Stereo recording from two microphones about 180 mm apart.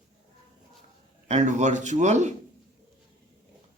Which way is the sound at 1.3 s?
40° right (ahead or behind).